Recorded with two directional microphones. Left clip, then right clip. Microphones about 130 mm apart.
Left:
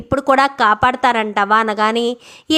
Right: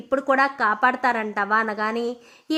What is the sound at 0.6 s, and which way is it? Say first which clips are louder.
A woman's voice: left 7 dB; 25° left (ahead or behind).